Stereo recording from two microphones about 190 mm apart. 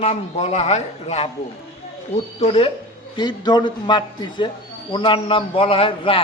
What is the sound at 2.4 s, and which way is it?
A man's voice, 30° left (ahead or behind).